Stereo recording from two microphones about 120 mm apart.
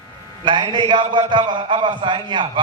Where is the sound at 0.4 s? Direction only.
40° right (ahead or behind).